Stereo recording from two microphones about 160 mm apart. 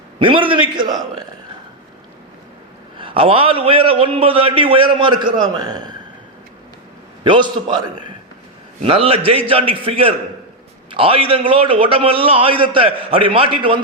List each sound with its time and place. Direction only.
0.2 s a man's voice: 30° right (ahead or behind)
3.0 s a man's voice: 35° right (ahead or behind)
7.3 s a man's voice: 30° right (ahead or behind)